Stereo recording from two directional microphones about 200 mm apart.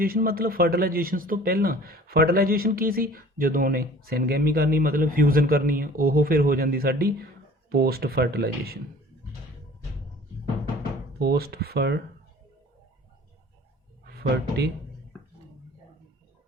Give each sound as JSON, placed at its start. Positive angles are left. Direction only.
{"t": 0.0, "sound": "a man's voice", "side_deg": -45}
{"t": 11.2, "sound": "a man's voice", "side_deg": -50}